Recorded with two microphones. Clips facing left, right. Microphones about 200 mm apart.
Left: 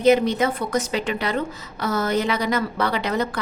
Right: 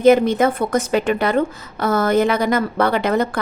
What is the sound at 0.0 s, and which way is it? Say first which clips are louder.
A woman's voice: right 4 dB; 50° right (ahead or behind).